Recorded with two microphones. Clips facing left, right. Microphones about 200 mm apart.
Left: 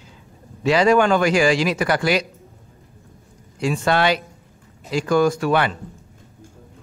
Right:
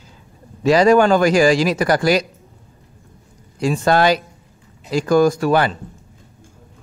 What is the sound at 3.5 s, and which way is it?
A man's voice, 40° right (ahead or behind).